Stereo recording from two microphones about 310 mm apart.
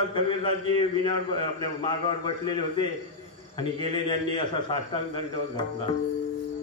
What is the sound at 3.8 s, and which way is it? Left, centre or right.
A man's voice, centre.